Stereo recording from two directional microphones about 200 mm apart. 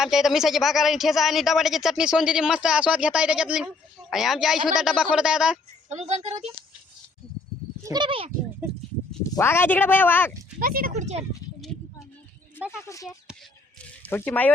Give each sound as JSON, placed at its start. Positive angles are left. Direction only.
{"t": 0.0, "sound": "speech", "side_deg": 0}
{"t": 5.9, "sound": "speech", "side_deg": -35}
{"t": 7.9, "sound": "speech", "side_deg": -25}
{"t": 9.3, "sound": "speech", "side_deg": 10}
{"t": 10.6, "sound": "speech", "side_deg": -45}
{"t": 12.5, "sound": "a sound", "side_deg": -5}
{"t": 12.8, "sound": "speech", "side_deg": 15}